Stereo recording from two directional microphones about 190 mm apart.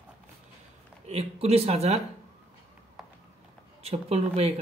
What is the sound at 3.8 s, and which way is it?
Speech, 35° right (ahead or behind).